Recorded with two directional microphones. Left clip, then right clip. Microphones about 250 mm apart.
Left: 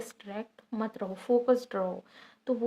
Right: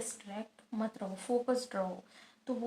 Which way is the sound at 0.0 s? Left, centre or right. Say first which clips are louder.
Left 3 dB; left.